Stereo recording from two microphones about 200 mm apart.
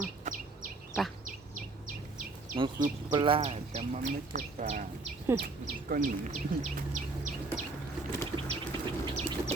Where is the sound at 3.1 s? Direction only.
25° right (ahead or behind).